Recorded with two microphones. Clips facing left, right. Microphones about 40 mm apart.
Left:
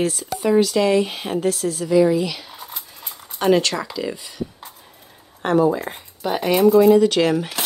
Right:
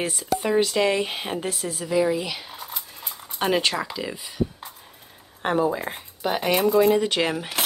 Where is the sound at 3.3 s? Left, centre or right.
Centre.